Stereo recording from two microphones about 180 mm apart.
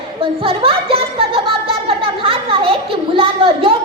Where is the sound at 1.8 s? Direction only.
30° right (ahead or behind).